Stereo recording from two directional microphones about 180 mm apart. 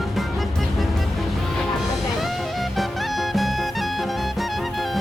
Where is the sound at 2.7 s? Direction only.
Centre (ahead or behind).